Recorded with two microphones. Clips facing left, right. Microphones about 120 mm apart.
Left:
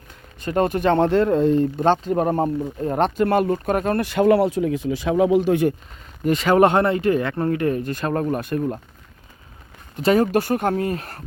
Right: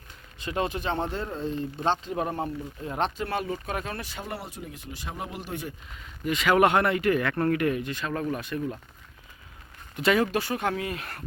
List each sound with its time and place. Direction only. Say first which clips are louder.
0.3 s speech: left 8 dB; 50° left (ahead or behind); by 5.7 s 80° left
6.2 s speech: left 6 dB; 35° left (ahead or behind)
9.9 s speech: left 6 dB; 35° left (ahead or behind)